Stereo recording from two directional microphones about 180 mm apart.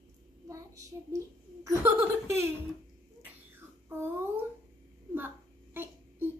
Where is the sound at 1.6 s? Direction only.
15° right (ahead or behind).